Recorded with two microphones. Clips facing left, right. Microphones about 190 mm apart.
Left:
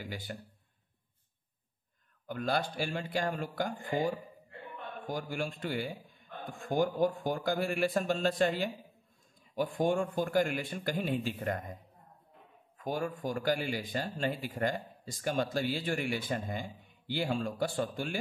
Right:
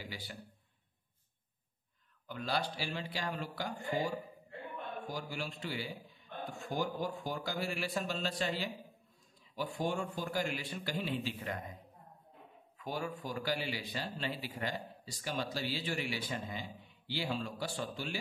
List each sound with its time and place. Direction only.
0.0 s speech: 50° left (ahead or behind)
2.2 s speech: 50° left (ahead or behind)
5.1 s speech: 50° left (ahead or behind)